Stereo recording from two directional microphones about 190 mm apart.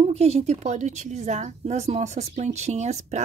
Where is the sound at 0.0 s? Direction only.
35° right (ahead or behind).